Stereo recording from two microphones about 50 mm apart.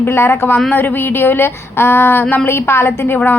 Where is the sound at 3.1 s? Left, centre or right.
Left.